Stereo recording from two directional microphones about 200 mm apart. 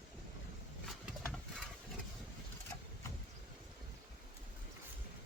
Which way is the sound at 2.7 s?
20° left (ahead or behind).